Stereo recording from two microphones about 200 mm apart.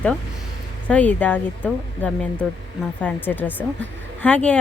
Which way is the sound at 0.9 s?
5° left (ahead or behind).